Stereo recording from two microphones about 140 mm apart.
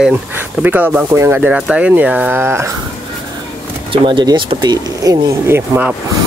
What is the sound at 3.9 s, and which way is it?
Speech, 35° right (ahead or behind).